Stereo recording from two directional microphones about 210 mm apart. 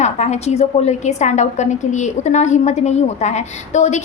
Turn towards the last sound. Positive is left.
turn(degrees=35)  # may be behind; listen again after turning